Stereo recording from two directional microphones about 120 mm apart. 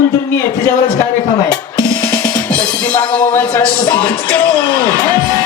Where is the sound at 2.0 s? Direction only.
15° left (ahead or behind).